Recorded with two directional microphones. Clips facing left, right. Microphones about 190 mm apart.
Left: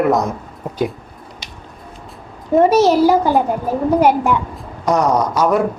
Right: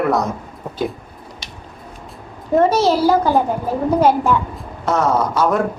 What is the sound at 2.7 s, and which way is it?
Speech, 15° left (ahead or behind).